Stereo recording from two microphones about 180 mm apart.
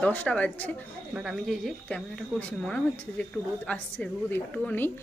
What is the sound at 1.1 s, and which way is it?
A woman's voice, centre (ahead or behind).